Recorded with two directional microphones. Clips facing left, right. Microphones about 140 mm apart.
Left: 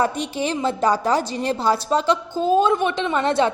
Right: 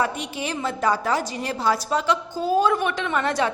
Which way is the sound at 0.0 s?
35° left (ahead or behind).